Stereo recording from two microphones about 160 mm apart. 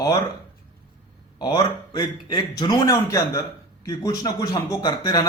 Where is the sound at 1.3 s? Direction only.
25° left (ahead or behind).